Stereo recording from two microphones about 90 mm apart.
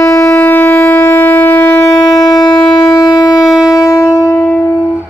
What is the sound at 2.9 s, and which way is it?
Wind instrument, 45° left (ahead or behind).